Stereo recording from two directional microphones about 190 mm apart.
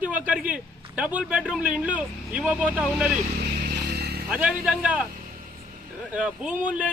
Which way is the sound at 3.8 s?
60° right (ahead or behind).